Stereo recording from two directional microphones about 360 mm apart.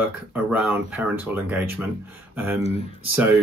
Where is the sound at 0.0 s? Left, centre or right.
Centre.